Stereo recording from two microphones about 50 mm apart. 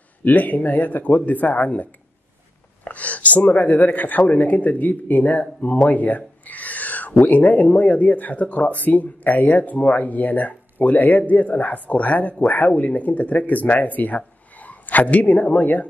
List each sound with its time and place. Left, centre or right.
0.2 s speech: left